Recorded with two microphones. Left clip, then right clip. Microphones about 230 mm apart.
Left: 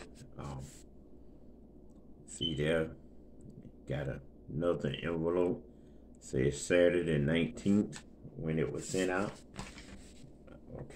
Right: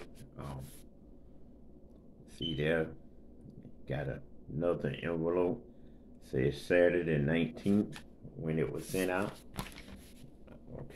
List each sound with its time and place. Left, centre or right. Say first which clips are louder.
2.5 s speech: right 1 dB; centre
3.8 s speech: right 1 dB; centre
8.4 s speech: even; centre
9.6 s a sound: right 6 dB; right